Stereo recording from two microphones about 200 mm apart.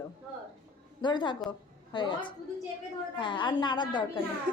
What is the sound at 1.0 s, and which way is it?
A woman's voice, 25° left (ahead or behind).